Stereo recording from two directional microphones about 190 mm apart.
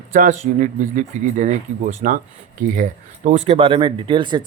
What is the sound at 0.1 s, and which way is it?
Speech, 45° right (ahead or behind).